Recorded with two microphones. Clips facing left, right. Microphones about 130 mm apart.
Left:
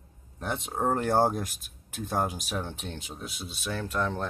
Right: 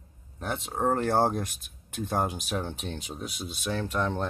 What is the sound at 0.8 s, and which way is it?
Speech, centre (ahead or behind).